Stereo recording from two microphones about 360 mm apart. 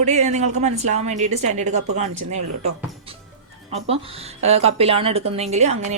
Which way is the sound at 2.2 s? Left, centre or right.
Right.